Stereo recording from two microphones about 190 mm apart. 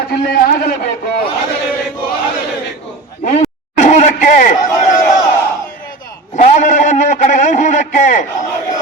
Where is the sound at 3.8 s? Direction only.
40° left (ahead or behind).